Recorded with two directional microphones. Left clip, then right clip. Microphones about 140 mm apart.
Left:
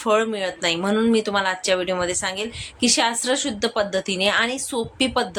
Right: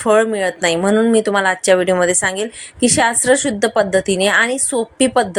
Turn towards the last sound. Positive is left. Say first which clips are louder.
# right 7 dB
turn(degrees=-40)  # may be behind; listen again after turning